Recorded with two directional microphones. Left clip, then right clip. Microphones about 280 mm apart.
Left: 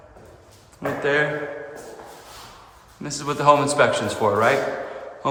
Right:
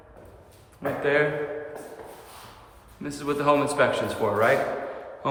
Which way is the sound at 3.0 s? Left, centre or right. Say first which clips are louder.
Left 6 dB; centre.